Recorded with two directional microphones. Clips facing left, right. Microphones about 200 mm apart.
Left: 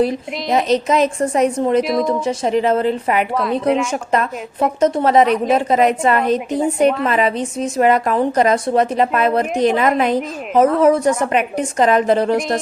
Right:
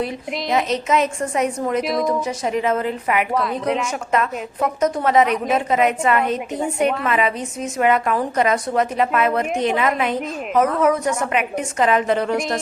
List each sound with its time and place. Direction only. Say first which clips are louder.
0.5 s a woman's voice: left 4 dB; 35° left (ahead or behind)
1.8 s a woman's voice: left 4 dB; centre (ahead or behind)
2.2 s a woman's voice: left 4 dB; 30° left (ahead or behind)
3.3 s a woman's voice: left 4 dB; centre (ahead or behind)
4.1 s a woman's voice: left 2 dB; 35° left (ahead or behind)